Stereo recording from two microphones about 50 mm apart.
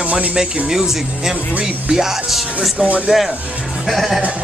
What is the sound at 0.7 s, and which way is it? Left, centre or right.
Speech, centre.